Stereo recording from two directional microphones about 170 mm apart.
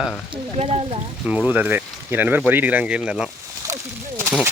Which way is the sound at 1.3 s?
5° right (ahead or behind).